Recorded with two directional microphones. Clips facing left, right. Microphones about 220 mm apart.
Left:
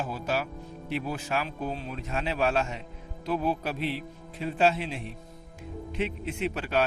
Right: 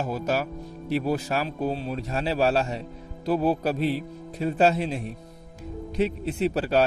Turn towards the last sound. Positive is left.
turn(degrees=-35)  # may be behind; listen again after turning